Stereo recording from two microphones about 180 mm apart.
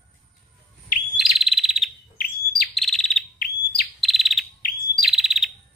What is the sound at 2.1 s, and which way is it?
Bird, 55° left (ahead or behind).